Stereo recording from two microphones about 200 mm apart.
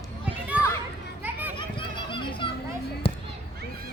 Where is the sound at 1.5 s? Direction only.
25° left (ahead or behind).